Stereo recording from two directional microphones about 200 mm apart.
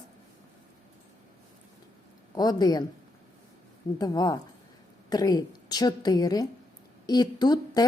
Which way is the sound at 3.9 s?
20° left (ahead or behind).